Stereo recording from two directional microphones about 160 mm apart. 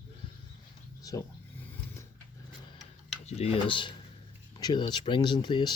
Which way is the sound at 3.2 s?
40° left (ahead or behind).